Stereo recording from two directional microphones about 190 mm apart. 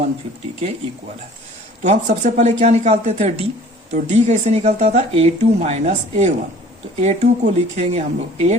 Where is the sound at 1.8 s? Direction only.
40° right (ahead or behind).